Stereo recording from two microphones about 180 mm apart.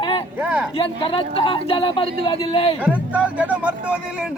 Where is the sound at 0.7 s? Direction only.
30° left (ahead or behind).